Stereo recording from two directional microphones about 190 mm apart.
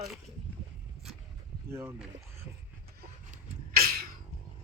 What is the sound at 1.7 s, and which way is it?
Speech, 15° right (ahead or behind).